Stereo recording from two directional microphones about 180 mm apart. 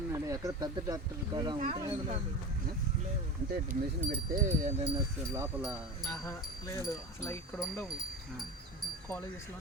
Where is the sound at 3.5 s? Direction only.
50° right (ahead or behind).